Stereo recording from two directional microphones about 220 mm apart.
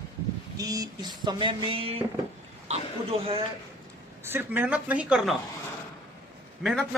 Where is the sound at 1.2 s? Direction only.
20° right (ahead or behind).